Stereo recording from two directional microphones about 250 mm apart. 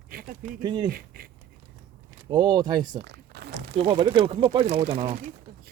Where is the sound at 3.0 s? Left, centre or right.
Right.